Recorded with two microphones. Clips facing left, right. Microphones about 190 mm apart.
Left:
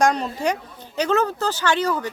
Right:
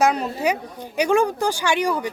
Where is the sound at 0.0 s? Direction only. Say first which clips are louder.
Even; 5° right (ahead or behind).